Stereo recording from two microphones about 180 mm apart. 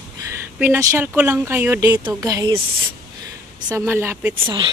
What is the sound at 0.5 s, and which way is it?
A woman's voice, 10° right (ahead or behind).